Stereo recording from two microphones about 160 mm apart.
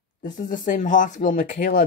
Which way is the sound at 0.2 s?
55° left (ahead or behind).